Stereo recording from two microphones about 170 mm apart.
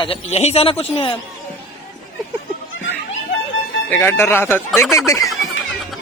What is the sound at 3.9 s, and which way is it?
Speech, 15° left (ahead or behind).